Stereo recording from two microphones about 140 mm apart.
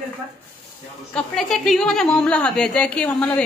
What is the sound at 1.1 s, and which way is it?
A woman's voice, 5° left (ahead or behind).